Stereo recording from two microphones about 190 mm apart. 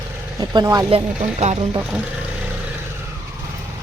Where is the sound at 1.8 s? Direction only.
5° right (ahead or behind).